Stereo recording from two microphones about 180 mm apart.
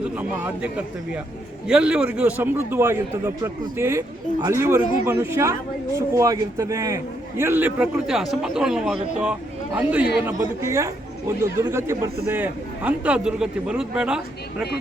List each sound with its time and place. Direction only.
0.0 s a man's voice: 10° right (ahead or behind)